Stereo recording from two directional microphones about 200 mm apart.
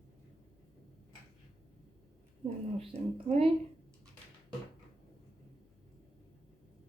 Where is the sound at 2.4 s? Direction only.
20° right (ahead or behind).